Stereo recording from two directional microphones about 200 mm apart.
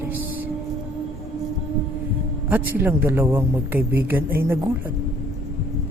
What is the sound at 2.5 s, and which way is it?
A man's voice, 10° right (ahead or behind).